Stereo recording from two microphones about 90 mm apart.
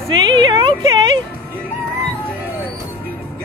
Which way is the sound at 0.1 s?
70° right (ahead or behind).